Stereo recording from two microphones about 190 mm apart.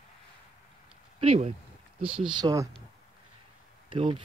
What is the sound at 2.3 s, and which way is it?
Speech, 20° right (ahead or behind).